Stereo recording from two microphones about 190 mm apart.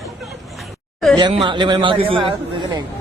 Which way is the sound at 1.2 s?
25° right (ahead or behind).